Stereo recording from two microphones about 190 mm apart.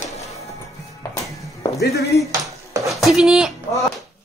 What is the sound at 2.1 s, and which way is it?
Speech, 60° left (ahead or behind).